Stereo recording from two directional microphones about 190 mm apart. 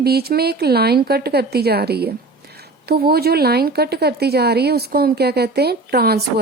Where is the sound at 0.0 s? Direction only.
55° right (ahead or behind).